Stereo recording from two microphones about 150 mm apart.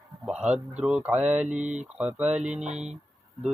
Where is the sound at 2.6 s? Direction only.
50° right (ahead or behind).